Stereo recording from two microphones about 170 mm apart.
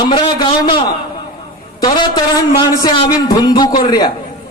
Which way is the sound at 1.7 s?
20° left (ahead or behind).